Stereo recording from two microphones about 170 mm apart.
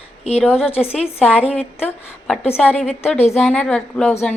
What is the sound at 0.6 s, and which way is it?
A woman's voice, 35° left (ahead or behind).